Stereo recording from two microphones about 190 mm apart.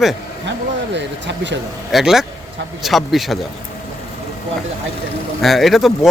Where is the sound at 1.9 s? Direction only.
Centre (ahead or behind).